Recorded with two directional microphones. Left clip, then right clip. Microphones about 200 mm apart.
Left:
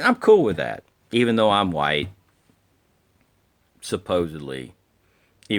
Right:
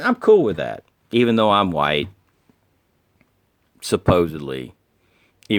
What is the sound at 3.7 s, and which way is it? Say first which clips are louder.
Speech: right 6 dB; 35° right (ahead or behind).